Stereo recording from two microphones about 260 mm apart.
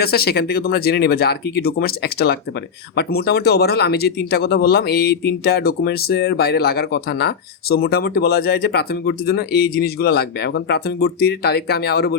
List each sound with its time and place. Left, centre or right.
0.0 s speech: left